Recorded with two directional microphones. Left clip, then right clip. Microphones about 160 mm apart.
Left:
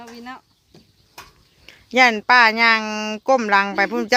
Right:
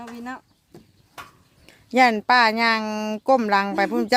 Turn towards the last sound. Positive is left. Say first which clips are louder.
# left 2 dB
turn(degrees=-5)  # may be behind; listen again after turning